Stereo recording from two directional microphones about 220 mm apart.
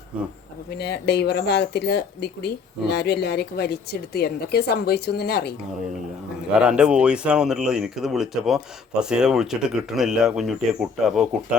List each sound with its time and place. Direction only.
0.8 s speech: 50° left (ahead or behind)
6.5 s speech: 5° right (ahead or behind)